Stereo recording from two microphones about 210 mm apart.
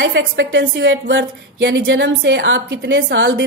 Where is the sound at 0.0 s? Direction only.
60° right (ahead or behind).